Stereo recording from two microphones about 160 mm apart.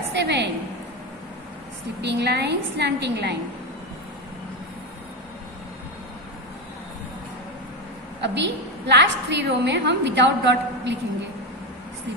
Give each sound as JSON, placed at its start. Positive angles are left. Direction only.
{"t": 0.1, "sound": "a sound", "side_deg": -90}
{"t": 2.0, "sound": "a woman's voice", "side_deg": -90}
{"t": 8.2, "sound": "a woman's voice", "side_deg": -90}